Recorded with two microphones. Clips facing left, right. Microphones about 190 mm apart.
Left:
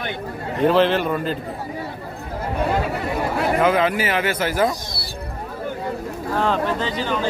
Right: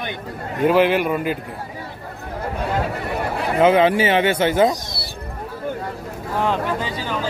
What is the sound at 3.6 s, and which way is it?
Speech, 25° right (ahead or behind).